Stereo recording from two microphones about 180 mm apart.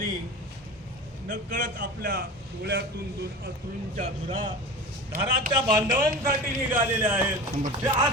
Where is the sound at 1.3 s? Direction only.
45° right (ahead or behind).